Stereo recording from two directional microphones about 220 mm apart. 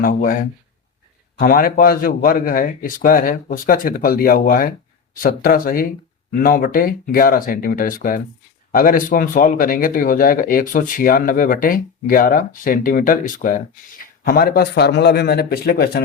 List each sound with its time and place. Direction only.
0.0 s speech: 40° left (ahead or behind)